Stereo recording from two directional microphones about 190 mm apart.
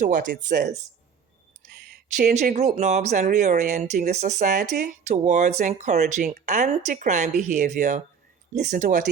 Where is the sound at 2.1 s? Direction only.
45° right (ahead or behind).